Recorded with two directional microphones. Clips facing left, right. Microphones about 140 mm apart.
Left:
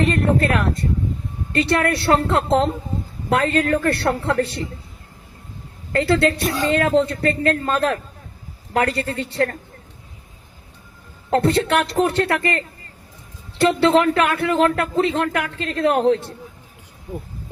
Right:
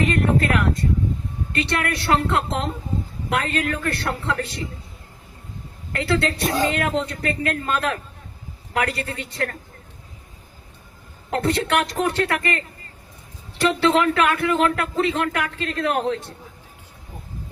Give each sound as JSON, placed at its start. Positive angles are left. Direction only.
{"t": 0.1, "sound": "speech", "side_deg": 35}
{"t": 5.9, "sound": "speech", "side_deg": 35}
{"t": 6.4, "sound": "speech", "side_deg": -35}
{"t": 6.7, "sound": "speech", "side_deg": 35}
{"t": 11.3, "sound": "speech", "side_deg": 30}